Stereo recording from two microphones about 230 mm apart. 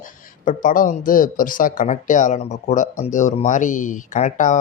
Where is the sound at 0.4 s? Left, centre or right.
Left.